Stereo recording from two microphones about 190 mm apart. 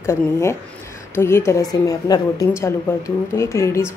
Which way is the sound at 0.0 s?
15° left (ahead or behind).